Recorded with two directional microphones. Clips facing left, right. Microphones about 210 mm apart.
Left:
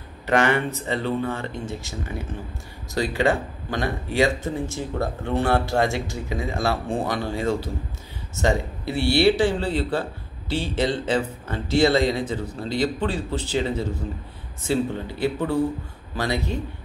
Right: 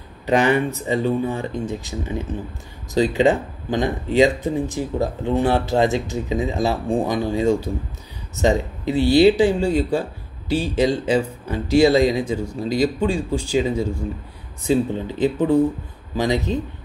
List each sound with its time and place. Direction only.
0.3 s speech: 15° right (ahead or behind)